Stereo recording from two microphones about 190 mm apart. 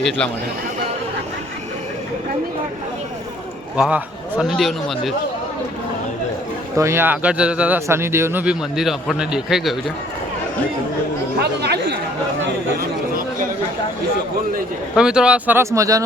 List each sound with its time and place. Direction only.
3.8 s a man's voice: 5° right (ahead or behind)
6.7 s speech: 15° right (ahead or behind)
11.3 s speech: 60° right (ahead or behind)
14.9 s speech: 5° right (ahead or behind)